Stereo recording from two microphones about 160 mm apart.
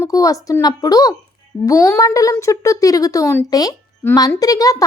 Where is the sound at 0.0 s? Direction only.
20° left (ahead or behind).